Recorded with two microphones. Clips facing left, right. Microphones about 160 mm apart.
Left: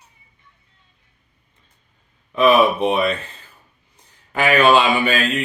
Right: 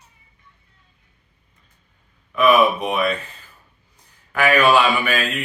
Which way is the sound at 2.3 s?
25° left (ahead or behind).